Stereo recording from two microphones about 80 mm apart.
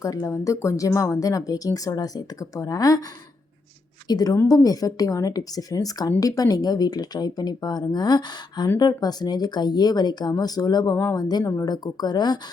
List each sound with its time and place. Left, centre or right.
0.0 s speech: left
4.1 s speech: left
11.4 s speech: left
11.7 s speech: left